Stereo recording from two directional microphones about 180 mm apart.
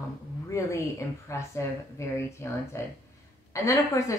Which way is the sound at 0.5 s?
15° left (ahead or behind).